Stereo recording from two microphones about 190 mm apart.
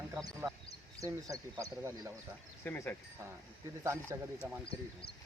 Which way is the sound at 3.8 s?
15° right (ahead or behind).